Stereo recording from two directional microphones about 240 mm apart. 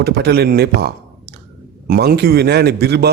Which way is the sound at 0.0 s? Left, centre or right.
Right.